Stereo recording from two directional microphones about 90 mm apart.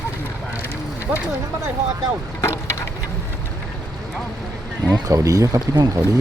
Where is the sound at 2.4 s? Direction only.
30° left (ahead or behind).